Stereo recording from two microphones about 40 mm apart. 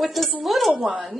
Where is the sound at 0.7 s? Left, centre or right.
Right.